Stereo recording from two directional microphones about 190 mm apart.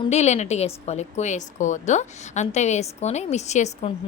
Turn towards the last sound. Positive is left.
turn(degrees=35)  # may be behind; listen again after turning